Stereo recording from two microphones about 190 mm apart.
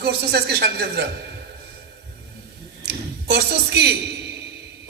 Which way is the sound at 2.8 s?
60° right (ahead or behind).